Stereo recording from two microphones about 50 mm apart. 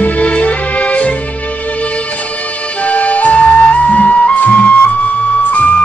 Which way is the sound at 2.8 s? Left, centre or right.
Left.